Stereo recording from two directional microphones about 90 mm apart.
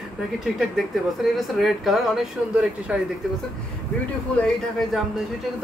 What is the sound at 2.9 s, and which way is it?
Speech, 10° right (ahead or behind).